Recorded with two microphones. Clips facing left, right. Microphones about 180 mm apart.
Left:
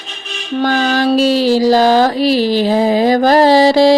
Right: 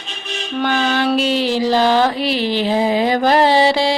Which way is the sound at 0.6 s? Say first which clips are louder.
Left 4 dB; 40° left (ahead or behind).